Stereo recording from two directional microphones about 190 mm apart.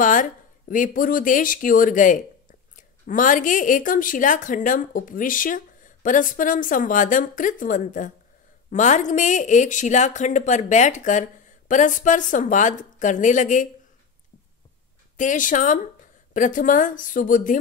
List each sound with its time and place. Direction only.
0.0 s a woman's voice: 45° left (ahead or behind)
15.1 s a woman's voice: 40° left (ahead or behind)